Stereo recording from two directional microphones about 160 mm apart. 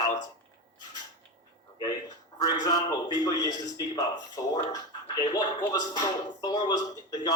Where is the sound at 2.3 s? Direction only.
25° left (ahead or behind).